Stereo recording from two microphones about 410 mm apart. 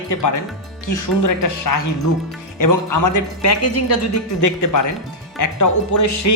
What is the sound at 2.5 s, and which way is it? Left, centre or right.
Speech, left.